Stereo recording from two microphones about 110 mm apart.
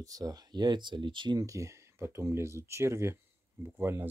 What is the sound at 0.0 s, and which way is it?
Speech, 35° right (ahead or behind).